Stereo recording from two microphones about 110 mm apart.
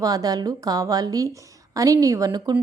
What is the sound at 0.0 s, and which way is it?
A woman's voice, 35° right (ahead or behind).